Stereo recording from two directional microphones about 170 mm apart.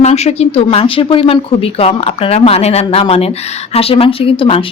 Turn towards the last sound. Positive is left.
turn(degrees=30)  # may be behind; listen again after turning